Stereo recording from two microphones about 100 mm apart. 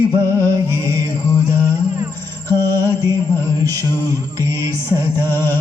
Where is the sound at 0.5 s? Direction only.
40° right (ahead or behind).